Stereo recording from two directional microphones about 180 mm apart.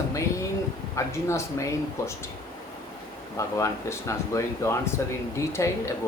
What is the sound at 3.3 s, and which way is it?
Speech, 15° left (ahead or behind).